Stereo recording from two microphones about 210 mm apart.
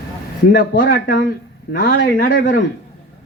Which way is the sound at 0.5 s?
50° left (ahead or behind).